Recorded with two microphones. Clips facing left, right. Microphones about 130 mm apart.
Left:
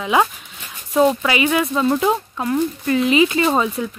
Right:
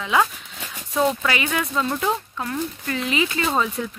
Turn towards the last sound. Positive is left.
turn(degrees=25)  # may be behind; listen again after turning